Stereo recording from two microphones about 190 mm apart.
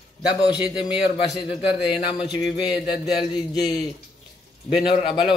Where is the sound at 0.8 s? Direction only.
25° left (ahead or behind).